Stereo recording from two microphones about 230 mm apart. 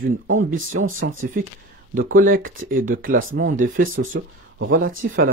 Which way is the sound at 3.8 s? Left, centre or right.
Right.